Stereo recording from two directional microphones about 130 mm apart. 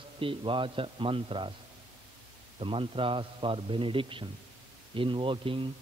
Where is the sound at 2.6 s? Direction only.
40° right (ahead or behind).